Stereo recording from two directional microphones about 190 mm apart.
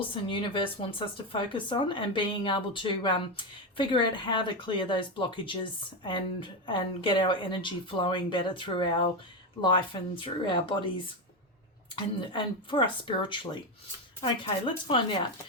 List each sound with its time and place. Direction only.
0.3 s speech: 25° left (ahead or behind)
12.2 s speech: 25° left (ahead or behind)